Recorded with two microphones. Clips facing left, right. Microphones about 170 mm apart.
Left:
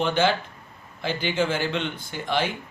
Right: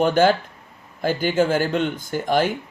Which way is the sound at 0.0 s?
45° right (ahead or behind).